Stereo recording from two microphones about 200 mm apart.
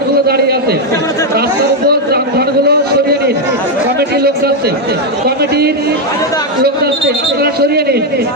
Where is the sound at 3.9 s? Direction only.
55° right (ahead or behind).